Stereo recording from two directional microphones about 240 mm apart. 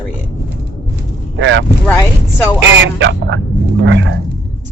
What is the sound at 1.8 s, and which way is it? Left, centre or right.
Speech, centre.